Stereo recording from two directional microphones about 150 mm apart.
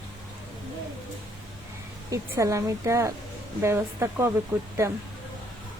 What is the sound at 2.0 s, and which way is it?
A woman's voice, 20° right (ahead or behind).